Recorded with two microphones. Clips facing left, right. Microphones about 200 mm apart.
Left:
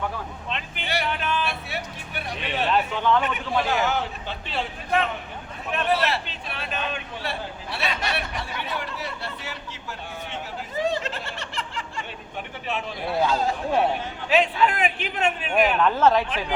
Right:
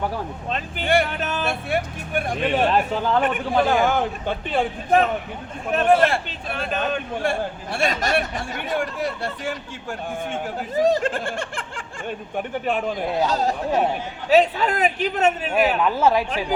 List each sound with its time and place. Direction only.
0.5 s a man's voice: 45° right (ahead or behind)
15.8 s a woman's voice: 10° right (ahead or behind)